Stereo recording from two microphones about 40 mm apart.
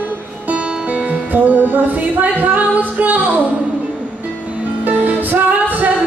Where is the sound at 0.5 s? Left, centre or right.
Right.